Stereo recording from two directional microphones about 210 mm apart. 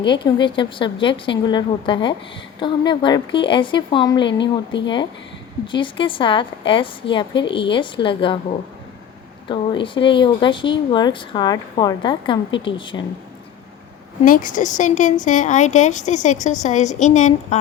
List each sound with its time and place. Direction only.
0.0 s speech: 20° left (ahead or behind)
5.6 s speech: 25° left (ahead or behind)
9.5 s speech: 25° left (ahead or behind)
14.3 s a woman's voice: 40° left (ahead or behind)